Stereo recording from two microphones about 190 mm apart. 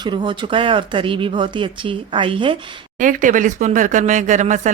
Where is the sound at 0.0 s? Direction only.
25° right (ahead or behind).